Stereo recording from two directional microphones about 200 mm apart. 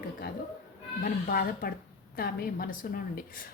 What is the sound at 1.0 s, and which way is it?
Speech, 50° left (ahead or behind).